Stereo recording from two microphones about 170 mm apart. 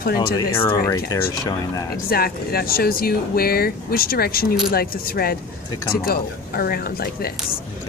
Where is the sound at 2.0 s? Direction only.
65° left (ahead or behind).